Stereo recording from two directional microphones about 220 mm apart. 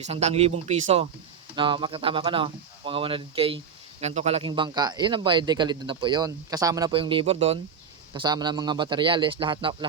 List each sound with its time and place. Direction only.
0.0 s speech: 30° right (ahead or behind)